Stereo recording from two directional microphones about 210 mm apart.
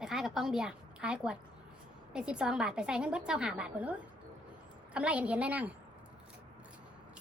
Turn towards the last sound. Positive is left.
turn(degrees=-5)  # may be behind; listen again after turning